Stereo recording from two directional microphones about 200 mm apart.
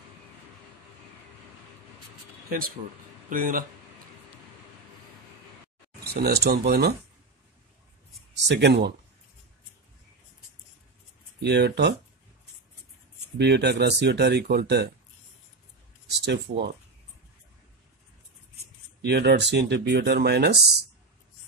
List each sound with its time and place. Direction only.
3.3 s speech: 45° right (ahead or behind)
6.2 s speech: 50° right (ahead or behind)
8.5 s speech: 60° right (ahead or behind)
11.4 s speech: 55° right (ahead or behind)
13.4 s speech: 55° right (ahead or behind)
16.1 s speech: 55° right (ahead or behind)
19.0 s speech: 55° right (ahead or behind)